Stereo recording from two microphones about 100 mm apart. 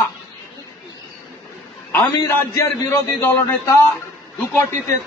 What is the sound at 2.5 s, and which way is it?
A man's voice, 25° left (ahead or behind).